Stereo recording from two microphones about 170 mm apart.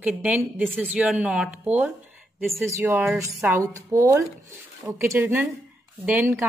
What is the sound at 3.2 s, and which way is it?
Speech, 15° right (ahead or behind).